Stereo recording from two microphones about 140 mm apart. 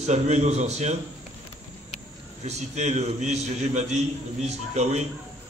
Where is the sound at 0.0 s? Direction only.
55° right (ahead or behind).